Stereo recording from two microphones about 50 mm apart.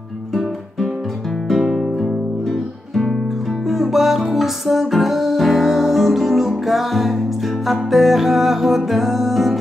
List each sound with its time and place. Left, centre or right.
2.9 s music: centre